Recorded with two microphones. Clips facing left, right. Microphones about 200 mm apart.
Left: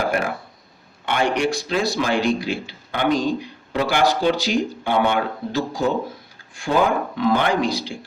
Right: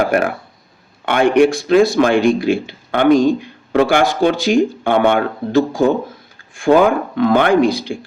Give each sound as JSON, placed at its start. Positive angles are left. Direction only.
{"t": 0.1, "sound": "speech", "side_deg": -60}